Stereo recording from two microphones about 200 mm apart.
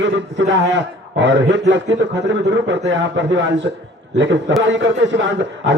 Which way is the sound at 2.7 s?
65° right (ahead or behind).